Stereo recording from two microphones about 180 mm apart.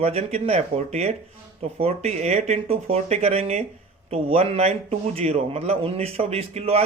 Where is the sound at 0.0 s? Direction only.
35° right (ahead or behind).